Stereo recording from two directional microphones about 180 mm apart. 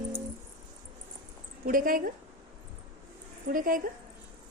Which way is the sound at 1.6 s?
50° right (ahead or behind).